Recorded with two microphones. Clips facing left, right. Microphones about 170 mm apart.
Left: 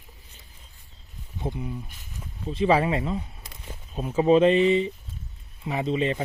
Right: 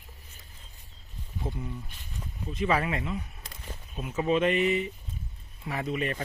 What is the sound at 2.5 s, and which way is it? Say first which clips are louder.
Speech: left 6 dB; 30° left (ahead or behind).